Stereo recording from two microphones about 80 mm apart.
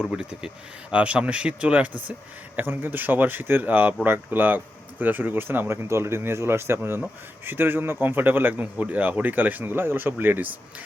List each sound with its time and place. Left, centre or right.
0.1 s speech: centre; by 10.5 s right